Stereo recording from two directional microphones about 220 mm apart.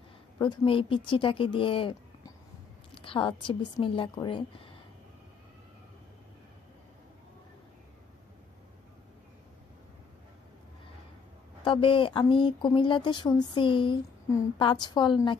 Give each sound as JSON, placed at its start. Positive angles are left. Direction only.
{"t": 0.4, "sound": "speech", "side_deg": 25}
{"t": 11.6, "sound": "speech", "side_deg": 20}